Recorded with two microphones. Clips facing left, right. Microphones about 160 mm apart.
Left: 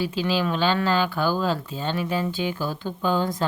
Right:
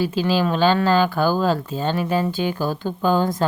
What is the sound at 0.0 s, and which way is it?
Speech, 45° right (ahead or behind).